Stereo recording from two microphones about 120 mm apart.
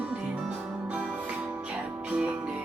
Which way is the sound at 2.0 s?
10° right (ahead or behind).